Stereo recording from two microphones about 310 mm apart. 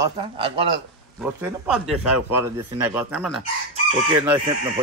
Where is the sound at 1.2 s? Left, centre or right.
Centre.